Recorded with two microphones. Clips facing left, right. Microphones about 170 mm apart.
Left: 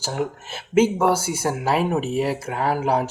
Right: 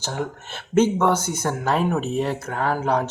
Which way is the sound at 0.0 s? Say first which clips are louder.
Left 2 dB; 10° left (ahead or behind).